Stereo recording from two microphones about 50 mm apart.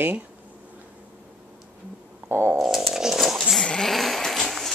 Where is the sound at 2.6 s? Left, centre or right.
Centre.